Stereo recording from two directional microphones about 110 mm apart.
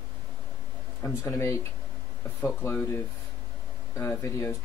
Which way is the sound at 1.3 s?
25° left (ahead or behind).